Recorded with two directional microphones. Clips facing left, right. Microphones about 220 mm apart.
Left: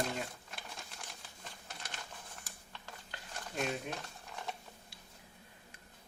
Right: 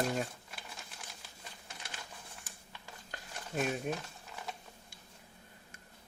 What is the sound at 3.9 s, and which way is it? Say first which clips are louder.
Speech: right 6 dB; 45° right (ahead or behind).